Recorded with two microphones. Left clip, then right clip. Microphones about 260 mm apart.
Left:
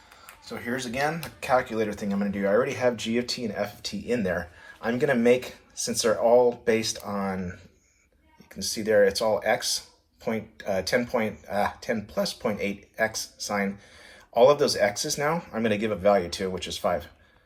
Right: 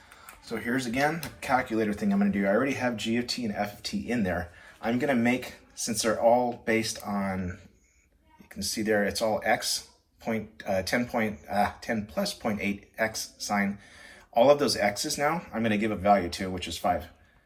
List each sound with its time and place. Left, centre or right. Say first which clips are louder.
0.5 s speech: right 1 dB; centre
1.2 s speech: left 3 dB; centre
8.5 s speech: left 5 dB; centre